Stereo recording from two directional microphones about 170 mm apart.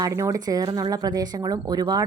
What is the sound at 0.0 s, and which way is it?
Speech, 20° right (ahead or behind).